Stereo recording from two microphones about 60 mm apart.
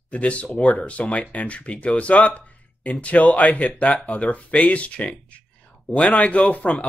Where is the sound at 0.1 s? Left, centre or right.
Left.